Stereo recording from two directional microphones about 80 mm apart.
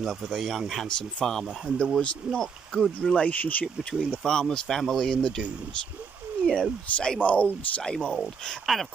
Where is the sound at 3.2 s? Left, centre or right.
Left.